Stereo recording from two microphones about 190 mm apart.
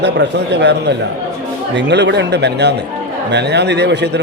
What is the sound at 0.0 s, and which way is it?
Speech, 60° right (ahead or behind).